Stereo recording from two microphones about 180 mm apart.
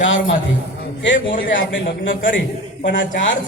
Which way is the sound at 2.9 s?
90° left.